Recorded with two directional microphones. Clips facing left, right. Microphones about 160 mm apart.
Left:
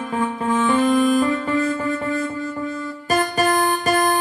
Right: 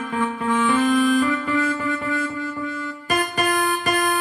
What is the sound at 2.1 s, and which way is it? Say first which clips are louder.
Music: left 2 dB; 30° left (ahead or behind).